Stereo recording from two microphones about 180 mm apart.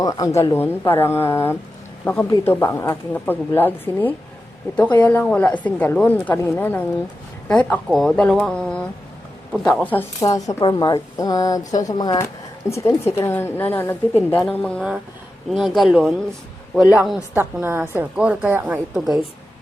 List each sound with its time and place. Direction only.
0.0 s a woman's voice: 20° left (ahead or behind); by 16.1 s centre (ahead or behind)
17.3 s a woman's voice: 15° right (ahead or behind)